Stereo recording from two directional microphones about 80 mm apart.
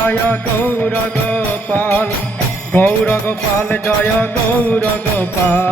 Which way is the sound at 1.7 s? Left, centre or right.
Left.